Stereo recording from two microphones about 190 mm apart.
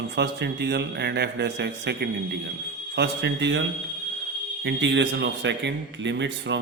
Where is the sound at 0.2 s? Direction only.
60° right (ahead or behind).